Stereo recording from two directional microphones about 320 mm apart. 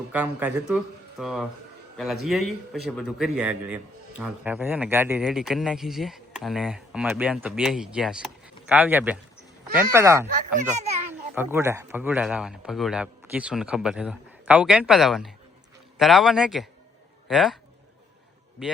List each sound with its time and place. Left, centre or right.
0.1 s speech: centre
10.2 s speech: right
11.3 s a man's voice: centre